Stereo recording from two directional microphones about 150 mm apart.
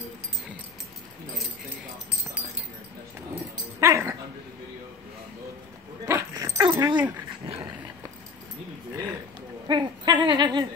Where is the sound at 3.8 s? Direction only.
20° right (ahead or behind).